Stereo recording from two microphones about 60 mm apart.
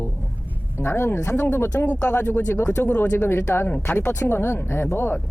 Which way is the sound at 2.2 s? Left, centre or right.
Left.